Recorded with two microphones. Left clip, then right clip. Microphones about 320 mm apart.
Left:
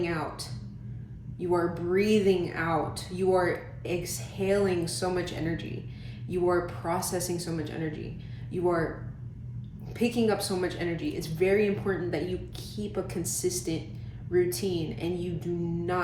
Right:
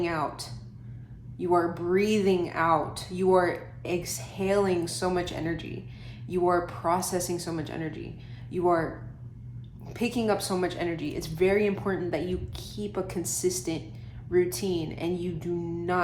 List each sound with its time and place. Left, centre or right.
0.0 s a sound: right
1.4 s a woman's voice: right
9.9 s a woman's voice: right